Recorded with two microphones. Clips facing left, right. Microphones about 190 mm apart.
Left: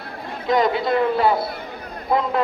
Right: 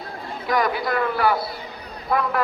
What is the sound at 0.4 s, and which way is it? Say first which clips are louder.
A man's voice: left 4 dB; 25° left (ahead or behind).